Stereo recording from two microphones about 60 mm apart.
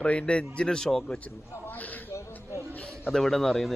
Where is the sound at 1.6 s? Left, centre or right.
Left.